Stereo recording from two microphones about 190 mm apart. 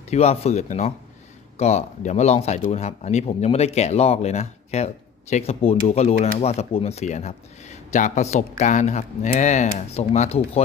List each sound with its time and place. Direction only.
0.1 s speech: 35° left (ahead or behind)